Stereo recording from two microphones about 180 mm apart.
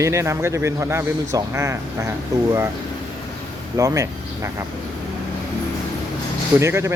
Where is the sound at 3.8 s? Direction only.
15° right (ahead or behind).